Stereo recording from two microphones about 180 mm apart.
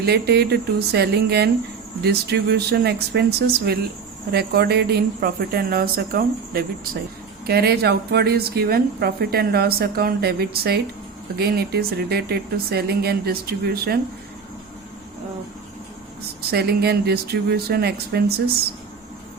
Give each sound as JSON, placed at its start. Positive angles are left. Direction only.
{"t": 0.0, "sound": "a woman's voice", "side_deg": -65}
{"t": 16.5, "sound": "a woman's voice", "side_deg": -60}